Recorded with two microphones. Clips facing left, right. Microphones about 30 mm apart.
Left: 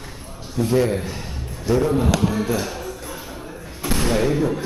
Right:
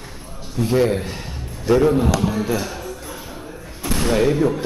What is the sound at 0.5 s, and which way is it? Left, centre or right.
A man's voice, centre.